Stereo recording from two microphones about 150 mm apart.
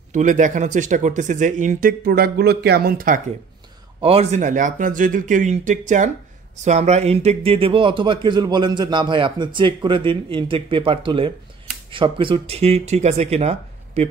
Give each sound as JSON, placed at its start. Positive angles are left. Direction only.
{"t": 0.1, "sound": "speech", "side_deg": -55}
{"t": 4.0, "sound": "speech", "side_deg": -45}